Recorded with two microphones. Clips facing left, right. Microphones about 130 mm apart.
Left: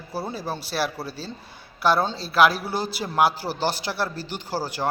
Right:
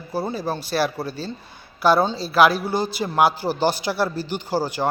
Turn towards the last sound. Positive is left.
turn(degrees=0)  # may be behind; listen again after turning